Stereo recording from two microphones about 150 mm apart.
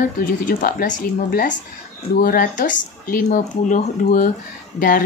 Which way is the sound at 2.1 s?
75° left (ahead or behind).